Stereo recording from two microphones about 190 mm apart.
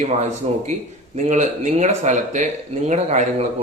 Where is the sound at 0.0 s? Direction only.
35° right (ahead or behind).